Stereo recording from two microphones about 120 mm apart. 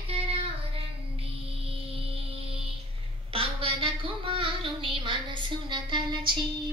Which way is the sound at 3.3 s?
50° right (ahead or behind).